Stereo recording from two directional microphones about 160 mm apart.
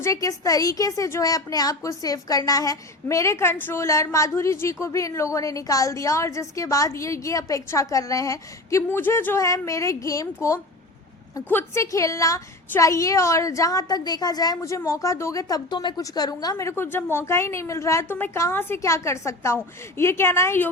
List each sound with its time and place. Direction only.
0.0 s a woman's voice: 20° left (ahead or behind)